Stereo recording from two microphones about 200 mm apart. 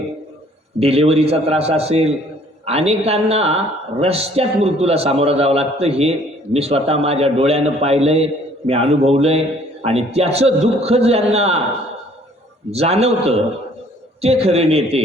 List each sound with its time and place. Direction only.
0.8 s a man's voice: 30° right (ahead or behind)
12.7 s a man's voice: 30° right (ahead or behind)